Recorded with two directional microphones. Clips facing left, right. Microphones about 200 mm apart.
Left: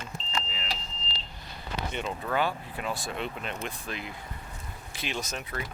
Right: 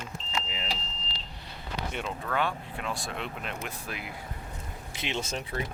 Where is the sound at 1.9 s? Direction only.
Centre (ahead or behind).